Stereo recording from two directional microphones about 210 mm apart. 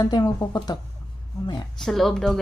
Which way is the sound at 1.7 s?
Centre (ahead or behind).